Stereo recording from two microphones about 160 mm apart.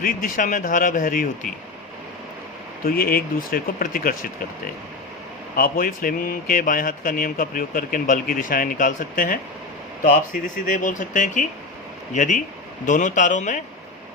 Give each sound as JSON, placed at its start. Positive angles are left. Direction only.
{"t": 0.0, "sound": "speech", "side_deg": 55}
{"t": 2.8, "sound": "speech", "side_deg": 65}